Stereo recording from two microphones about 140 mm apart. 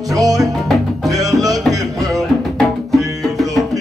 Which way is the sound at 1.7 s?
25° right (ahead or behind).